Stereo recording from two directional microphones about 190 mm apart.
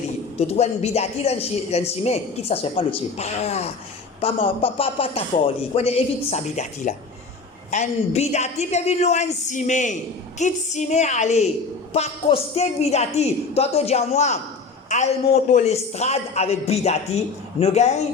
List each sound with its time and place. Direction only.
0.3 s a man's voice: 35° left (ahead or behind)